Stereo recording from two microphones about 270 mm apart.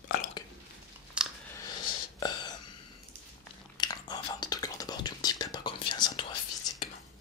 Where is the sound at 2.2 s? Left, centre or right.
Centre.